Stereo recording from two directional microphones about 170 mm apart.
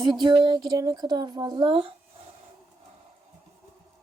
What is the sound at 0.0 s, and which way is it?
Speech, 25° right (ahead or behind).